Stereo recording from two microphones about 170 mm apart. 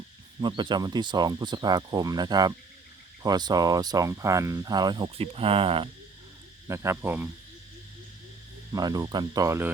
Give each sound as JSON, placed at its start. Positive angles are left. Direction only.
{"t": 0.3, "sound": "speech", "side_deg": -25}
{"t": 6.7, "sound": "speech", "side_deg": -15}
{"t": 8.7, "sound": "speech", "side_deg": -20}